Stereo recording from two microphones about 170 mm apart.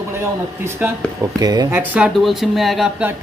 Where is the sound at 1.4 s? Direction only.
20° right (ahead or behind).